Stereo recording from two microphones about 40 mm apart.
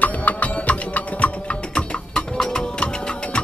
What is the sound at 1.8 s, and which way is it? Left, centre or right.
Music, left.